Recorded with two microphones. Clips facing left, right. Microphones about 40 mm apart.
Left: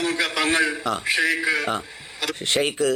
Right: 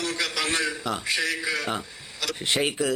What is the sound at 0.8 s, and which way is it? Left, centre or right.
A man's voice, centre.